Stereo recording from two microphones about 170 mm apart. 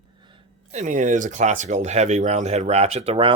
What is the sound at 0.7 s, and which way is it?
Speech, 45° right (ahead or behind).